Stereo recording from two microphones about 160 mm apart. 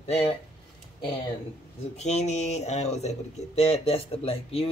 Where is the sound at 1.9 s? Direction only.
45° left (ahead or behind).